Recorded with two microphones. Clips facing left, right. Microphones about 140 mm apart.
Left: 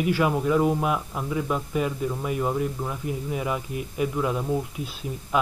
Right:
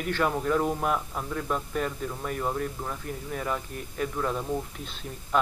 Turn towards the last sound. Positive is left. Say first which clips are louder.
# left 2 dB
turn(degrees=5)  # may be behind; listen again after turning